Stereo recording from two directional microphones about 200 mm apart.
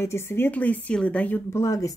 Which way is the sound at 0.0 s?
10° left (ahead or behind).